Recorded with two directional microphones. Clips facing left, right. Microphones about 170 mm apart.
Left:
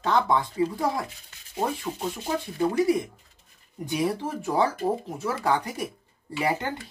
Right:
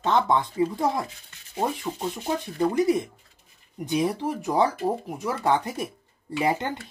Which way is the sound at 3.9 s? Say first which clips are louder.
Right 2 dB; 20° right (ahead or behind).